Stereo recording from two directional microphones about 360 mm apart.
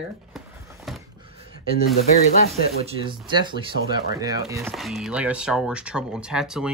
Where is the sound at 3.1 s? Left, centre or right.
Centre.